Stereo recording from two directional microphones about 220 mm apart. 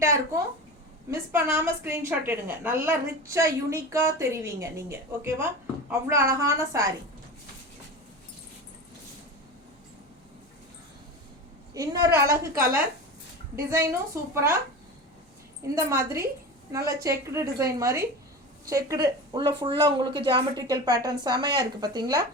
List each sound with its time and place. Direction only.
1.1 s a woman's voice: 10° right (ahead or behind)
11.7 s a woman's voice: 15° right (ahead or behind)
13.7 s a woman's voice: 10° right (ahead or behind)
15.7 s a woman's voice: 15° right (ahead or behind)